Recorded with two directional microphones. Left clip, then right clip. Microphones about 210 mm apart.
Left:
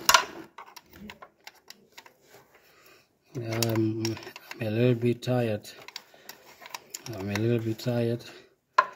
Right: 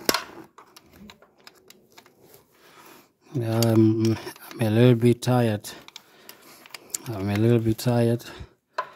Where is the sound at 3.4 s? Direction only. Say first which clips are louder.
Right 7 dB; 65° right (ahead or behind).